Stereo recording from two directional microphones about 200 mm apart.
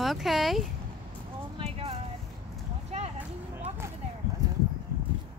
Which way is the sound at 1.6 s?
30° right (ahead or behind).